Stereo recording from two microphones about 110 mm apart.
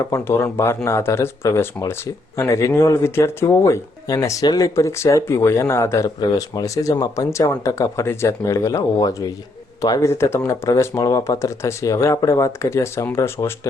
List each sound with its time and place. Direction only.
0.0 s speech: 25° left (ahead or behind)